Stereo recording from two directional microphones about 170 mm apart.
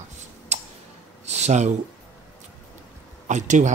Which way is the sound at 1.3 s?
40° right (ahead or behind).